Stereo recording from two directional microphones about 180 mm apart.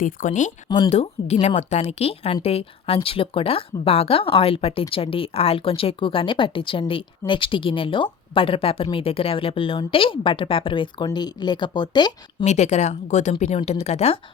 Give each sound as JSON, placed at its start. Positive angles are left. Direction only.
{"t": 0.0, "sound": "speech", "side_deg": 45}
{"t": 0.7, "sound": "speech", "side_deg": 30}
{"t": 12.5, "sound": "speech", "side_deg": 40}